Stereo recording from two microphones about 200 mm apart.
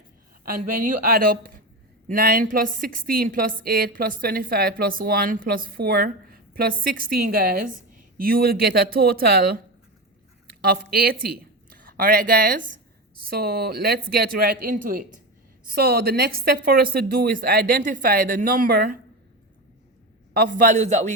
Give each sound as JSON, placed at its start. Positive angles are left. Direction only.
{"t": 0.4, "sound": "a woman's voice", "side_deg": -45}
{"t": 20.3, "sound": "a man's voice", "side_deg": -45}